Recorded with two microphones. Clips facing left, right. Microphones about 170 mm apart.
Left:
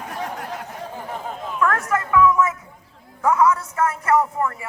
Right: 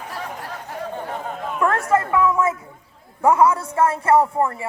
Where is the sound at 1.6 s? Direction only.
30° right (ahead or behind).